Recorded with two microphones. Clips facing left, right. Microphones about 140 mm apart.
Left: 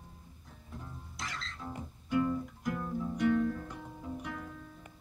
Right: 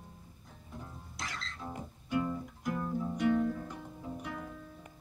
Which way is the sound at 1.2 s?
5° right (ahead or behind).